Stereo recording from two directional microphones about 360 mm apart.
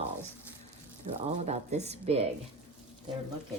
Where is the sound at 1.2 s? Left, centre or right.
Centre.